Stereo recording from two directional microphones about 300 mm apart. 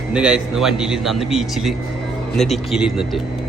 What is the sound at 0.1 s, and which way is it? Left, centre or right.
A man's voice, centre.